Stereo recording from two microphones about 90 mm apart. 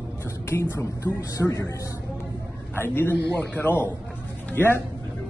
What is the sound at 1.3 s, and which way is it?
Speech, 35° left (ahead or behind).